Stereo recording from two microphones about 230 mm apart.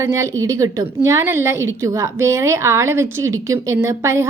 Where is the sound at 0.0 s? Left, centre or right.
Centre.